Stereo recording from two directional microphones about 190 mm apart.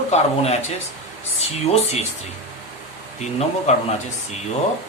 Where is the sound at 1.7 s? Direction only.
35° left (ahead or behind).